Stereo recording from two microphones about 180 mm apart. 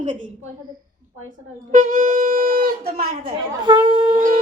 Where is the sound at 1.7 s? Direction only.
45° right (ahead or behind).